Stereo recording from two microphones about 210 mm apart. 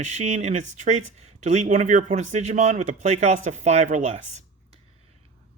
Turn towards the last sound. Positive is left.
turn(degrees=-30)  # may be behind; listen again after turning